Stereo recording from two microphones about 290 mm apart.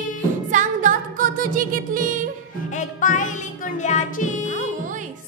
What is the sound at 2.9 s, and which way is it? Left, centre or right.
Music, left.